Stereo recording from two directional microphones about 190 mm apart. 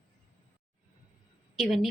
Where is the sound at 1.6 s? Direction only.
Centre (ahead or behind).